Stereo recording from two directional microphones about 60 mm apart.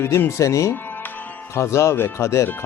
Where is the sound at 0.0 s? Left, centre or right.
Left.